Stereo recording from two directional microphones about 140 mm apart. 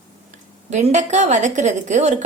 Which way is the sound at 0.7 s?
55° right (ahead or behind).